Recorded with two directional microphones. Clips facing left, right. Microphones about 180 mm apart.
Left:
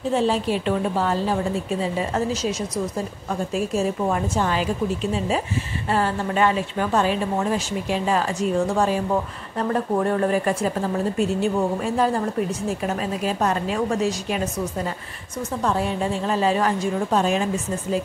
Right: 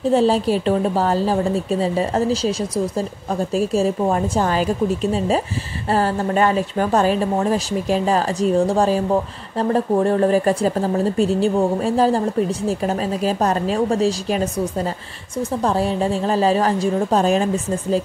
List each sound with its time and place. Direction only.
0.1 s a woman's voice: 35° right (ahead or behind)
5.9 s a woman's voice: 35° right (ahead or behind)